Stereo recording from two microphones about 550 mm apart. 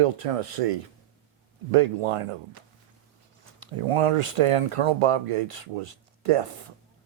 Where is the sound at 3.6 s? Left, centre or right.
Right.